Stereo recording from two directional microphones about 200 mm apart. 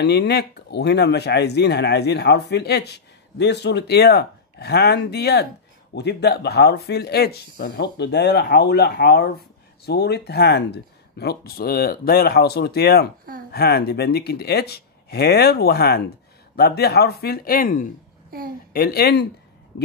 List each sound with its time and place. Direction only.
0.0 s speech: 55° left (ahead or behind)